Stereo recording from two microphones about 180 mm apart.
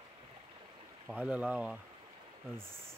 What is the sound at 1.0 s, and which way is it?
Speech, 5° right (ahead or behind).